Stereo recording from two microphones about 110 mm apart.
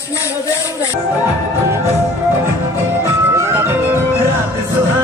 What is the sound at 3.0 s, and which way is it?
Music, 25° right (ahead or behind).